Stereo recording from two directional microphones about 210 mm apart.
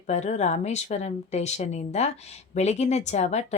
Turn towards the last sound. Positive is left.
turn(degrees=30)  # may be behind; listen again after turning